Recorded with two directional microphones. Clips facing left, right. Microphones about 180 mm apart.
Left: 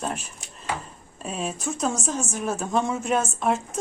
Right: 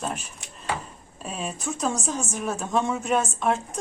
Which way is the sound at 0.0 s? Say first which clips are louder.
Left 1 dB; centre (ahead or behind).